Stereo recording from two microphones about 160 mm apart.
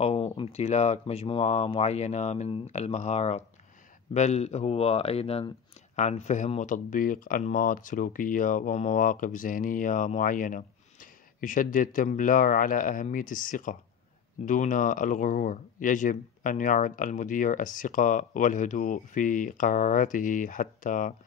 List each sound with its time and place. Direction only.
0.0 s speech: 40° left (ahead or behind); by 21.1 s 55° left (ahead or behind)